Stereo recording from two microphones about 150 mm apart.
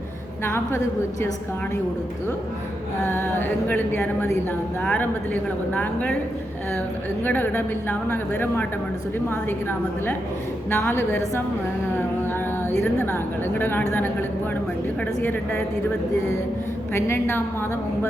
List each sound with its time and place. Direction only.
0.4 s speech: 15° left (ahead or behind)
3.0 s speech: 15° left (ahead or behind)
7.3 s speech: 10° left (ahead or behind)
13.1 s speech: 15° left (ahead or behind)
16.9 s speech: 15° left (ahead or behind)